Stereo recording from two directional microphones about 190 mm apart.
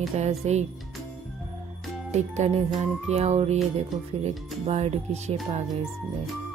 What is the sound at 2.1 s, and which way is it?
Speech, 35° right (ahead or behind).